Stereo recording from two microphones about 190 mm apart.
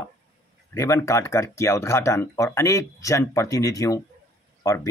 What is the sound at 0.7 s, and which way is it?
Speech, 15° left (ahead or behind).